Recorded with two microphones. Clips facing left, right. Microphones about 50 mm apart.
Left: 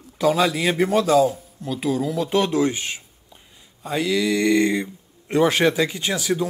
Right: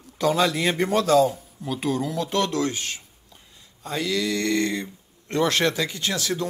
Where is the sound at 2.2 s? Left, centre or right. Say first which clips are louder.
Left 5 dB; centre.